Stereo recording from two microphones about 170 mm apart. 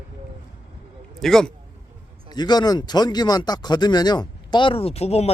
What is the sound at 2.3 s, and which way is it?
Speech, 25° left (ahead or behind).